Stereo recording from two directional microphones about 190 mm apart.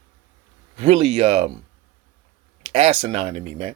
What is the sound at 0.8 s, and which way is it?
Speech, 35° right (ahead or behind).